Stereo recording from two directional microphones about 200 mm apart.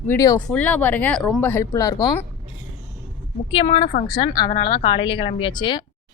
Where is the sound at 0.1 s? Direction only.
15° left (ahead or behind).